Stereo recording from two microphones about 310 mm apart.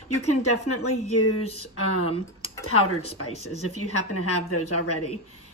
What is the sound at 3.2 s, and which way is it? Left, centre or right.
Speech, left.